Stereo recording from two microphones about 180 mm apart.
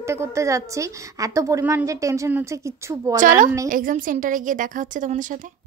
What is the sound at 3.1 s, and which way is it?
A woman's voice, 45° right (ahead or behind).